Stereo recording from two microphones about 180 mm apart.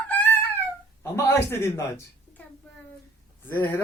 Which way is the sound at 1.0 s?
15° left (ahead or behind).